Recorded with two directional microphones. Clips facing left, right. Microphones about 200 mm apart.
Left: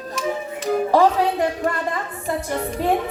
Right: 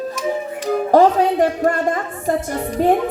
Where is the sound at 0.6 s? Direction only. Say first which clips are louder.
Right 3 dB; 50° right (ahead or behind).